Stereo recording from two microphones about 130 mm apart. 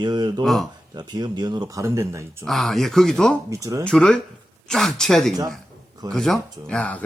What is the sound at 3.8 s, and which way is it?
Speech, 5° left (ahead or behind).